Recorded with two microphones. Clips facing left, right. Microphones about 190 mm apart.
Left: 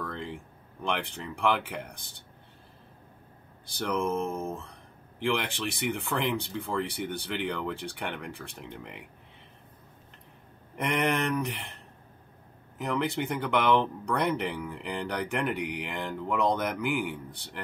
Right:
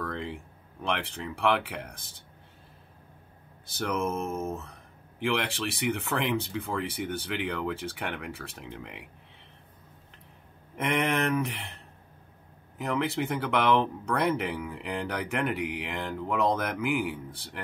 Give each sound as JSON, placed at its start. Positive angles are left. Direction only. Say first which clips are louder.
{"t": 0.0, "sound": "a sound", "louder": "right 2 dB", "side_deg": 0}
{"t": 0.8, "sound": "speech", "louder": "even", "side_deg": 0}
{"t": 3.7, "sound": "speech", "louder": "left 1 dB", "side_deg": -5}
{"t": 10.8, "sound": "speech", "louder": "right 1 dB", "side_deg": 0}